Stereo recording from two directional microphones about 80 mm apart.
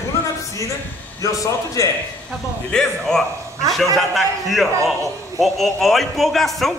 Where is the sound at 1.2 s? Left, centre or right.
Left.